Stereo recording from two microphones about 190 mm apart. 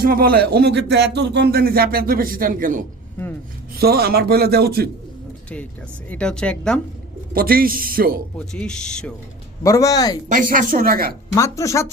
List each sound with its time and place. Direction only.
0.0 s a man's voice: 50° right (ahead or behind)
6.1 s speech: 5° left (ahead or behind)
7.3 s speech: 50° right (ahead or behind)
8.4 s speech: 5° left (ahead or behind)
9.6 s speech: 15° left (ahead or behind)
10.3 s speech: 45° right (ahead or behind)
11.3 s speech: 15° left (ahead or behind)